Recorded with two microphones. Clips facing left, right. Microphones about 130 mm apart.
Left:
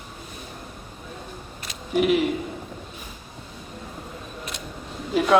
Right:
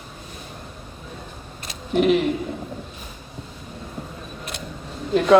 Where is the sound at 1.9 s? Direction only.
5° left (ahead or behind).